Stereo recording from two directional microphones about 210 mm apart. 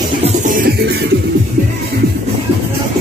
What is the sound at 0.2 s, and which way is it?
Music, 40° right (ahead or behind).